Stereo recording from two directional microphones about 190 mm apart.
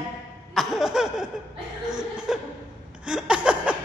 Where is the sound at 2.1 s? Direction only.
5° right (ahead or behind).